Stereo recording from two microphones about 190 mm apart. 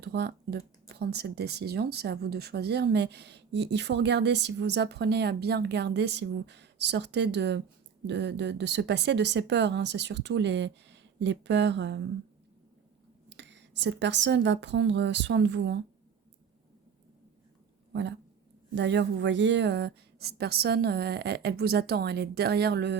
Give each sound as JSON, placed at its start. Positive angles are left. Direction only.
{"t": 0.0, "sound": "speech", "side_deg": -60}
{"t": 13.3, "sound": "speech", "side_deg": -70}
{"t": 18.7, "sound": "speech", "side_deg": -70}